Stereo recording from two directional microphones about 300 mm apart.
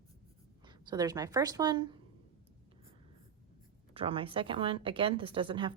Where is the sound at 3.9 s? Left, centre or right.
Centre.